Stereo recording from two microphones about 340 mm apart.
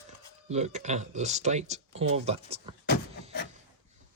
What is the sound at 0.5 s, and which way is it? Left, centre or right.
Speech, centre.